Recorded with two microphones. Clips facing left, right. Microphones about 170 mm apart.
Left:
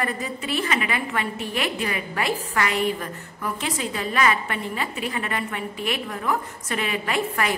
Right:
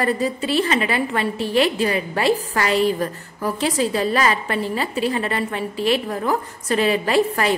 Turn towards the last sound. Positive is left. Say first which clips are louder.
# right 6 dB
turn(degrees=-30)  # may be behind; listen again after turning